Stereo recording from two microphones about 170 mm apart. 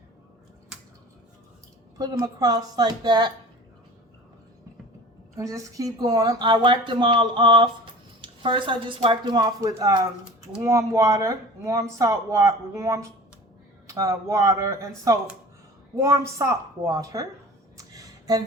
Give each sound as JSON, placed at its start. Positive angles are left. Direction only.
{"t": 2.0, "sound": "speech", "side_deg": -25}
{"t": 5.4, "sound": "speech", "side_deg": -20}
{"t": 17.7, "sound": "a sound", "side_deg": -20}